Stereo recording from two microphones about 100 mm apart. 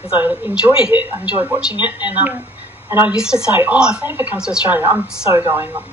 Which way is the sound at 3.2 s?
5° right (ahead or behind).